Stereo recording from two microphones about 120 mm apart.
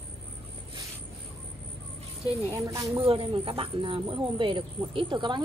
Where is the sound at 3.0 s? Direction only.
50° right (ahead or behind).